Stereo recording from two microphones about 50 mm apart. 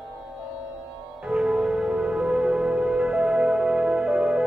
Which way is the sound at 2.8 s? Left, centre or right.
Centre.